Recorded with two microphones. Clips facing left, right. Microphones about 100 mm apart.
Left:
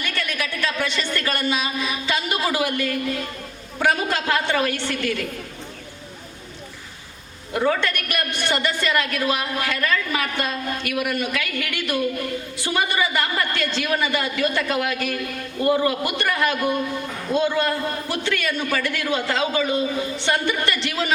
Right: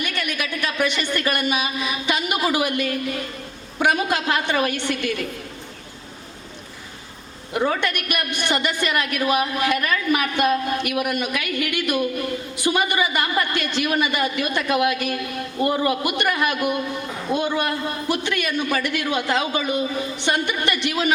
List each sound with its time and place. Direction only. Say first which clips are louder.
0.0 s a woman's voice: right 1 dB; 20° right (ahead or behind)
7.5 s a woman's voice: left 1 dB; 20° right (ahead or behind)